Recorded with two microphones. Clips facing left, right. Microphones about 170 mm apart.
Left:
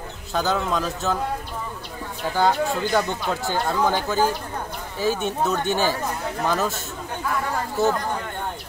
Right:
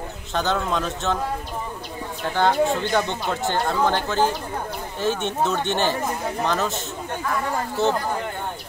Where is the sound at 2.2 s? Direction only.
5° left (ahead or behind).